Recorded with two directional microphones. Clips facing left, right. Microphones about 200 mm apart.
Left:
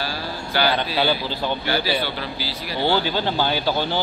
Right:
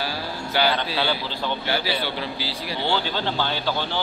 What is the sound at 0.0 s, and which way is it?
Speech, 20° right (ahead or behind).